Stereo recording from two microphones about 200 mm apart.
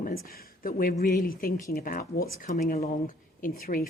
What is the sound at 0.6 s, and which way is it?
Speech, 45° left (ahead or behind).